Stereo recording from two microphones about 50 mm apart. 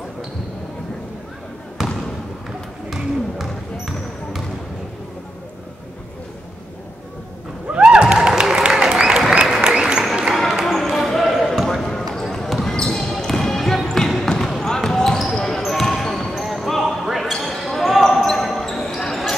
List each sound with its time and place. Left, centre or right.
1.8 s trickle: centre
2.9 s basketball bounce: centre
7.7 s music: centre
8.9 s applause: centre
10.3 s basketball bounce: centre
12.4 s a sound: centre
14.6 s basketball bounce: centre